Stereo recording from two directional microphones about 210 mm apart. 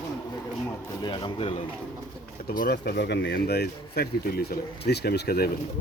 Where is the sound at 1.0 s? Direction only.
25° left (ahead or behind).